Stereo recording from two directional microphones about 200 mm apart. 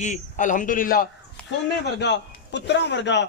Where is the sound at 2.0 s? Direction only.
60° left (ahead or behind).